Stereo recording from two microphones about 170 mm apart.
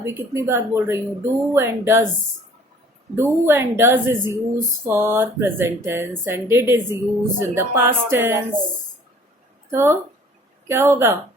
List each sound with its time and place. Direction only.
0.0 s speech: 15° right (ahead or behind)
3.2 s speech: 15° right (ahead or behind)
9.7 s speech: 15° right (ahead or behind)